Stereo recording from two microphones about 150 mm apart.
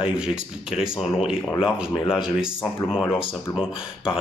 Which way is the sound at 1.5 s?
30° left (ahead or behind).